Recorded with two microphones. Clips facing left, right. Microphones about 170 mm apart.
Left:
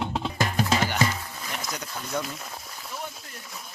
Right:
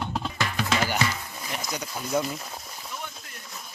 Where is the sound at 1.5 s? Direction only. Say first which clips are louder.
Right 2 dB; centre (ahead or behind).